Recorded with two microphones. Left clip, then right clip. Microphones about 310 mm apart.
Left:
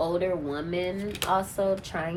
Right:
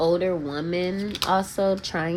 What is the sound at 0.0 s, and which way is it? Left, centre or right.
A woman's voice, right.